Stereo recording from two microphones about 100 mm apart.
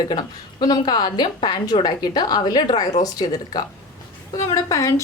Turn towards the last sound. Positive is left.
turn(degrees=35)  # may be behind; listen again after turning